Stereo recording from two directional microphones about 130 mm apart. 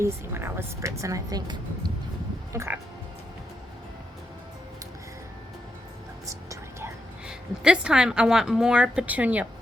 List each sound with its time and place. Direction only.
0.0 s a woman's voice: 20° right (ahead or behind)
2.5 s speech: 20° right (ahead or behind)
6.2 s whispering: 20° right (ahead or behind)
7.3 s a woman's voice: 5° right (ahead or behind)